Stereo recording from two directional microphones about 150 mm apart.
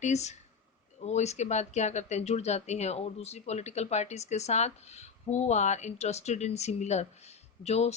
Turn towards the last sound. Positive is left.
turn(degrees=45)  # may be behind; listen again after turning